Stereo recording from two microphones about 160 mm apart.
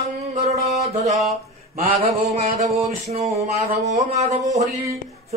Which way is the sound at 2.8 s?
40° right (ahead or behind).